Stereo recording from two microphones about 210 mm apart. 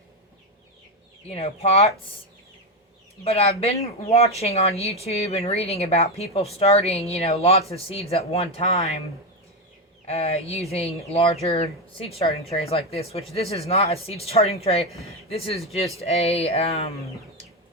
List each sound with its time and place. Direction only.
1.3 s speech: 30° left (ahead or behind)
3.2 s speech: 30° left (ahead or behind)
10.1 s speech: 30° left (ahead or behind)